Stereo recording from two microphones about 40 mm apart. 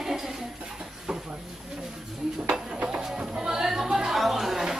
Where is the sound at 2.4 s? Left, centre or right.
Right.